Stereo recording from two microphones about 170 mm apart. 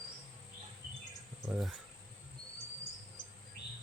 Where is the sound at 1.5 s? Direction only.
Centre (ahead or behind).